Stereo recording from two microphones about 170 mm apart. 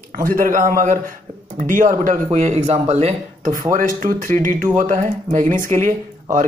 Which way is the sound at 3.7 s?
50° right (ahead or behind).